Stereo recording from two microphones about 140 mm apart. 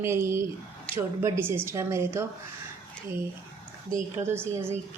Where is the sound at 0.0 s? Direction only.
20° right (ahead or behind).